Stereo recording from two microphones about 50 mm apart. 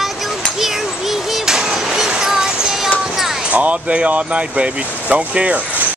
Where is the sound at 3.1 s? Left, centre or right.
Centre.